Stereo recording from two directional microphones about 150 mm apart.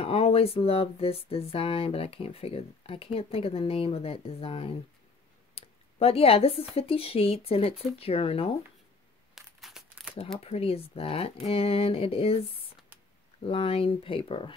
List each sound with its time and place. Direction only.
0.0 s speech: 40° left (ahead or behind)
5.5 s a sound: 40° left (ahead or behind)
6.7 s speech: 40° left (ahead or behind)
9.3 s crumpling: 5° right (ahead or behind)
10.4 s speech: 40° left (ahead or behind)
13.4 s speech: 40° left (ahead or behind)